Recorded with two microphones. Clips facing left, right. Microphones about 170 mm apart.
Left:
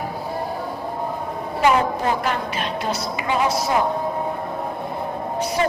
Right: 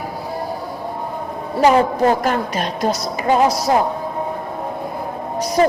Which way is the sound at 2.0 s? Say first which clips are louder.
Right 5 dB; 40° right (ahead or behind).